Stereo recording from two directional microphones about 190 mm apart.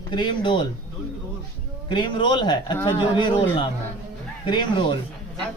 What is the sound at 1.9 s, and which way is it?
Speech, 25° left (ahead or behind).